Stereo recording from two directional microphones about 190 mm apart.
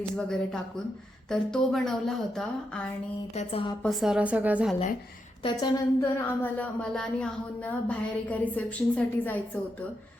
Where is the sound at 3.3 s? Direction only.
35° left (ahead or behind).